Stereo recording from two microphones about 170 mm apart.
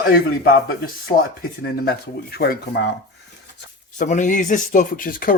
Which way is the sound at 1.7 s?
65° left (ahead or behind).